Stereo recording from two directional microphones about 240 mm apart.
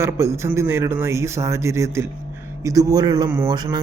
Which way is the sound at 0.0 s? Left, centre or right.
Centre.